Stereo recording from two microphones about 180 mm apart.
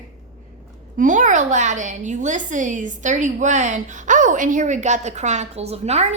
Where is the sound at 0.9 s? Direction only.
45° right (ahead or behind).